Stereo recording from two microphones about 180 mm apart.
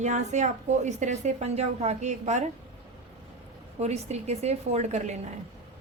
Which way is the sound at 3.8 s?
35° right (ahead or behind).